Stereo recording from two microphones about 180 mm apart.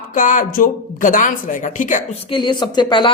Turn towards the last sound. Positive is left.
turn(degrees=25)  # may be behind; listen again after turning